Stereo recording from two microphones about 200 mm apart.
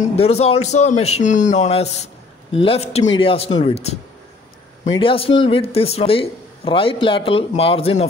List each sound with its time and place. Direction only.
0.1 s a man's voice: 30° left (ahead or behind)